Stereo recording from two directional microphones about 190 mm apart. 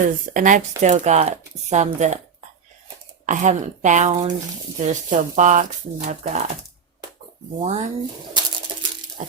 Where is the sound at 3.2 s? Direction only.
40° right (ahead or behind).